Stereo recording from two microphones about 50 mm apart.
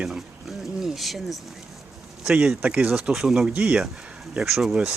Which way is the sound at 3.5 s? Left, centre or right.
Right.